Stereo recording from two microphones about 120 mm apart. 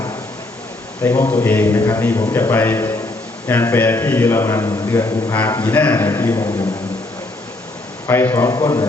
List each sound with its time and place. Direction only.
1.0 s a man's voice: 25° left (ahead or behind)
5.6 s a man's voice: 10° left (ahead or behind)
8.0 s a man's voice: 20° left (ahead or behind)